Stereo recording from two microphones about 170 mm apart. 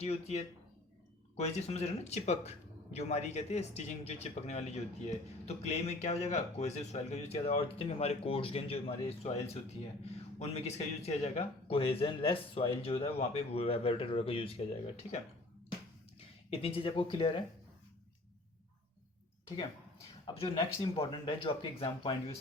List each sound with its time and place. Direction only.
0.0 s speech: 40° left (ahead or behind)
16.5 s speech: 35° left (ahead or behind)
20.2 s speech: 30° left (ahead or behind)